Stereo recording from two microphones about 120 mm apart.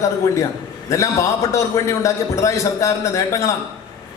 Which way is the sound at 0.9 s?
25° left (ahead or behind).